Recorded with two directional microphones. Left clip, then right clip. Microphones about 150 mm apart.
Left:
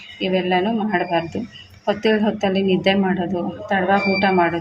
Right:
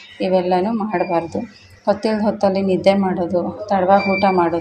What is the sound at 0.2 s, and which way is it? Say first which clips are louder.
A woman's voice: right 3 dB; 20° right (ahead or behind).